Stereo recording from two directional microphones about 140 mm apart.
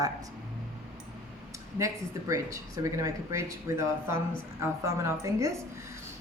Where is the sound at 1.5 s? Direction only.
20° right (ahead or behind).